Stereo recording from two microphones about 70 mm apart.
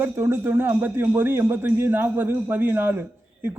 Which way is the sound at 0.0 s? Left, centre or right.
Right.